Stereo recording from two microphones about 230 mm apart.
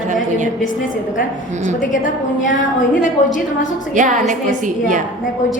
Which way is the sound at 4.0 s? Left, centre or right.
Right.